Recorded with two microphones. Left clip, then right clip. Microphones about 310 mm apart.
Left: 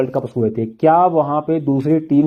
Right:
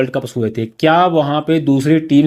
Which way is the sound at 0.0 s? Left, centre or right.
Right.